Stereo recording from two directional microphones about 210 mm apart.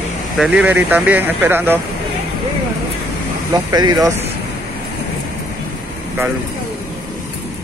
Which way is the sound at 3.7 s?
20° right (ahead or behind).